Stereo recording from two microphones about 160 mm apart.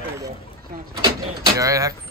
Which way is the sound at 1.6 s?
20° right (ahead or behind).